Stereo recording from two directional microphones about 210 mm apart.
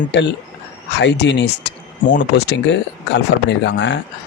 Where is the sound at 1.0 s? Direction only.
55° left (ahead or behind).